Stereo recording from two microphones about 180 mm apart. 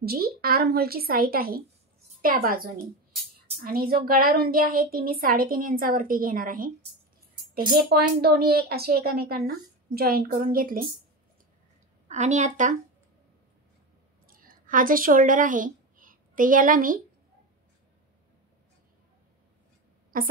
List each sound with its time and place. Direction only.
0.0 s a woman's voice: 60° right (ahead or behind)
7.7 s speech: 60° right (ahead or behind)
12.1 s a woman's voice: 40° right (ahead or behind)
14.2 s a woman's voice: 50° right (ahead or behind)
20.1 s a woman's voice: 50° right (ahead or behind)